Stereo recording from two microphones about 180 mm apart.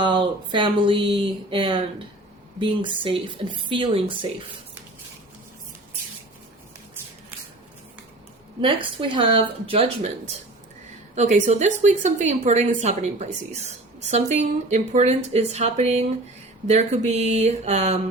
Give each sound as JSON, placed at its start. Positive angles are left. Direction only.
{"t": 0.0, "sound": "speech", "side_deg": -25}
{"t": 8.6, "sound": "speech", "side_deg": -30}
{"t": 11.1, "sound": "a woman's voice", "side_deg": -40}